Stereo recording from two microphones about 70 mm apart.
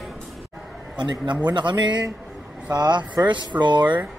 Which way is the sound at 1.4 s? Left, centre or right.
Right.